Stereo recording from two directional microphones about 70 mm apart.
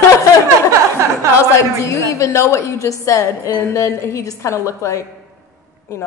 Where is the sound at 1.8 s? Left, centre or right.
Left.